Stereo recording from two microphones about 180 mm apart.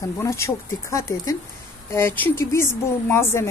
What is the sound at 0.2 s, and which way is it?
A woman's voice, 15° left (ahead or behind).